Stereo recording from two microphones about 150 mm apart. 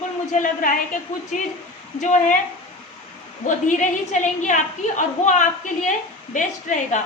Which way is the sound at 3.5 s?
55° left (ahead or behind).